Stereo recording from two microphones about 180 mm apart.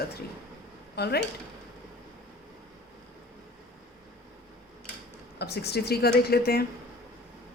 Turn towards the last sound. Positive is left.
turn(degrees=60)  # may be behind; listen again after turning